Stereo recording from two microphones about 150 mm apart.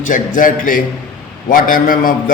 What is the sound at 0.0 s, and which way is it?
A man's voice, 60° left (ahead or behind).